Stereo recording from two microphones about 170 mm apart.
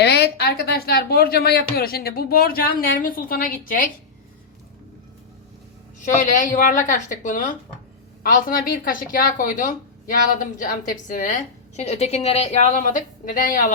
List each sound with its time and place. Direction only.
0.0 s a woman's voice: 75° left (ahead or behind); by 3.8 s 55° left (ahead or behind)
6.3 s a woman's voice: 50° left (ahead or behind)
11.8 s a woman's voice: 40° left (ahead or behind)